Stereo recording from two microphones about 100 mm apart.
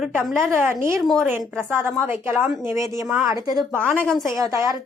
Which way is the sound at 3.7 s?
20° right (ahead or behind).